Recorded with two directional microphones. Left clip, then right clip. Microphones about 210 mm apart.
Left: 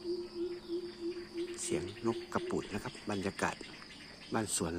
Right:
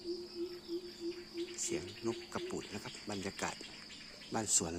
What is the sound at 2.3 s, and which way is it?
Speech, 5° left (ahead or behind).